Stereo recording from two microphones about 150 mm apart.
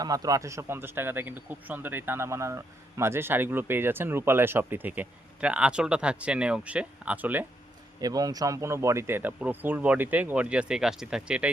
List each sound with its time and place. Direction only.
0.0 s speech: 25° right (ahead or behind)
8.0 s speech: 25° right (ahead or behind); by 11.4 s 5° right (ahead or behind)